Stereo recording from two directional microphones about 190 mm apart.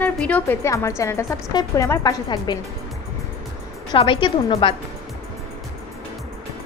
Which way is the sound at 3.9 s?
25° left (ahead or behind).